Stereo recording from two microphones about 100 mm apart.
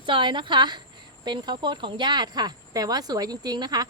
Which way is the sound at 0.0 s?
55° right (ahead or behind).